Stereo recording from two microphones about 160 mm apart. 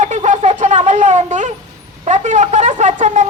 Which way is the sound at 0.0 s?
45° right (ahead or behind).